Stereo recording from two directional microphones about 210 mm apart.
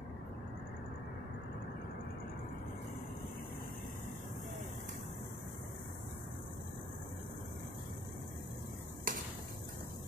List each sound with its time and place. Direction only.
9.1 s stir: 40° right (ahead or behind)